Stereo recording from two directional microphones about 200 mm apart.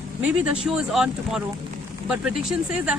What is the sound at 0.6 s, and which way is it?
Speech, 5° right (ahead or behind).